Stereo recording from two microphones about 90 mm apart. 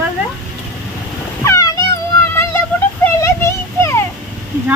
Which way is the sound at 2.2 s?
25° left (ahead or behind).